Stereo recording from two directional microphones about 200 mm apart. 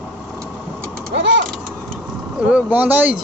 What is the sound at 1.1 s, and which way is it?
Speech, 60° right (ahead or behind).